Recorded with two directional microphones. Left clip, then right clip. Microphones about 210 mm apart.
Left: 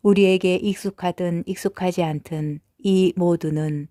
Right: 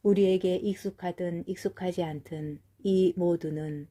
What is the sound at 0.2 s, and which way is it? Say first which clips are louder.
Speech: left 7 dB; 50° left (ahead or behind).